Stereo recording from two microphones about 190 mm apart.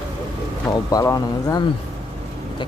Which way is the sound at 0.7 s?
20° left (ahead or behind).